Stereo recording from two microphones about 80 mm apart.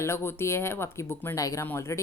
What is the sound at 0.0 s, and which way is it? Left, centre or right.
A woman's voice, left.